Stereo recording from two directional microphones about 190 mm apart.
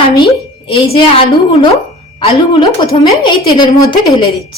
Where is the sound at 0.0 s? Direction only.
25° left (ahead or behind).